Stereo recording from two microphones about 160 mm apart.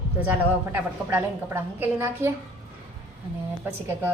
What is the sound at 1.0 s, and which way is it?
A woman's voice, 15° right (ahead or behind).